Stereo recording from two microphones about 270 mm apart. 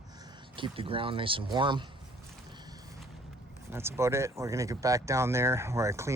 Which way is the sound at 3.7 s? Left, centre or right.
Centre.